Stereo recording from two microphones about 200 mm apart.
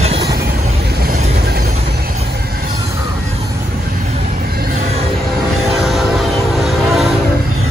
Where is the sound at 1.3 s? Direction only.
50° right (ahead or behind).